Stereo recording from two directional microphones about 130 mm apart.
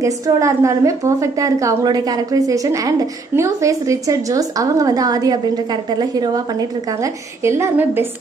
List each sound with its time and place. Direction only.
0.0 s a woman's voice: 25° right (ahead or behind)